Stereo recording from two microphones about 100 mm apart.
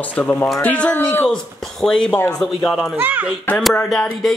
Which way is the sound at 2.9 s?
15° right (ahead or behind).